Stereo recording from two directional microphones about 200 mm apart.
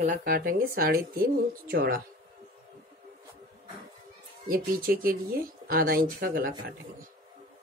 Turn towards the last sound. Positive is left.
turn(degrees=-45)  # may be behind; listen again after turning